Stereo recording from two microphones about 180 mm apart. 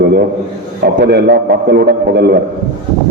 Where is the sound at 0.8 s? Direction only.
65° right (ahead or behind).